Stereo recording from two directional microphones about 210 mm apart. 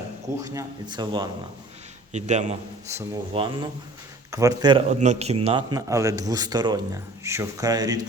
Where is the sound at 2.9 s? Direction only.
15° right (ahead or behind).